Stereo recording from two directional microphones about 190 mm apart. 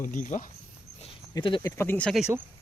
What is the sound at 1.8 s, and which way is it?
Speech, 10° left (ahead or behind).